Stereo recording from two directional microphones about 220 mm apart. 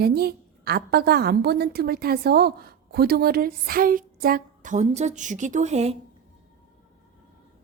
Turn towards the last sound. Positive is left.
turn(degrees=-30)  # may be behind; listen again after turning